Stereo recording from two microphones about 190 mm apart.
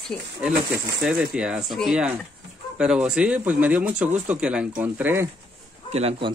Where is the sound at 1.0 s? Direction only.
5° right (ahead or behind).